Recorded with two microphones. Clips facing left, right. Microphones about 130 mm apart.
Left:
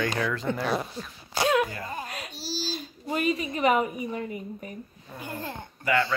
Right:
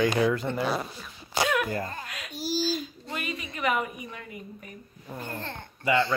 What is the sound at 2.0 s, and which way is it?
A woman's voice, 35° left (ahead or behind).